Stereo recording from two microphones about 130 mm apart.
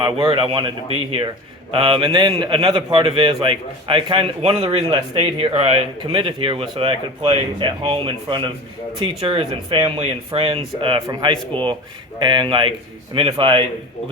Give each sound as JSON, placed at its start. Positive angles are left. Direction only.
{"t": 0.0, "sound": "a man's voice", "side_deg": -40}